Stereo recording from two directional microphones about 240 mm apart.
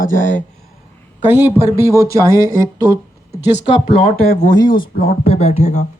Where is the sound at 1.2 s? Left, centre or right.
Centre.